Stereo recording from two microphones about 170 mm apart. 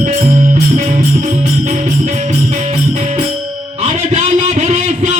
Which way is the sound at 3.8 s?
40° right (ahead or behind).